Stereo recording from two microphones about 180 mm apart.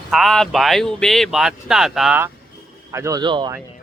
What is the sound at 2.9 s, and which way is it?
Speech, 15° right (ahead or behind).